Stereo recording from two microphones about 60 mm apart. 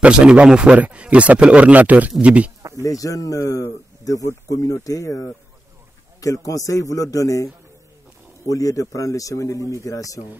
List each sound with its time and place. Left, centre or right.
0.0 s speech: centre
2.8 s a man's voice: left
8.5 s a man's voice: left